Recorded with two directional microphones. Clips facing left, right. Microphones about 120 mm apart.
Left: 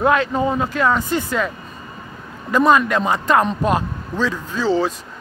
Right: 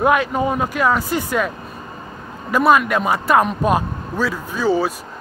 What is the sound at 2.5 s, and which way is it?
A man's voice, 10° right (ahead or behind).